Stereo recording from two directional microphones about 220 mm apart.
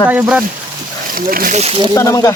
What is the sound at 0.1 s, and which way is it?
Speech, 5° right (ahead or behind).